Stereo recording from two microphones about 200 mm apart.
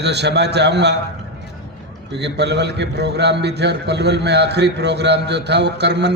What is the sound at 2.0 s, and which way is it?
A man's voice, 60° right (ahead or behind).